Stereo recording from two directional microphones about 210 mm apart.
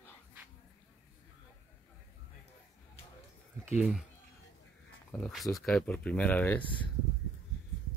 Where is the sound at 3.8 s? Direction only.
5° right (ahead or behind).